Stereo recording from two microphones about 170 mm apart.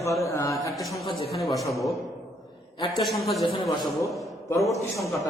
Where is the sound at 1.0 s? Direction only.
35° left (ahead or behind).